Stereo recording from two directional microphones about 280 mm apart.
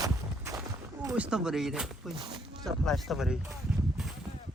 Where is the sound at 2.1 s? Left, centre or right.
Centre.